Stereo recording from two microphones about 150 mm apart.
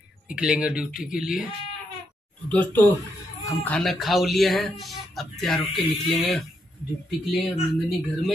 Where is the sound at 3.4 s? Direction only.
20° left (ahead or behind).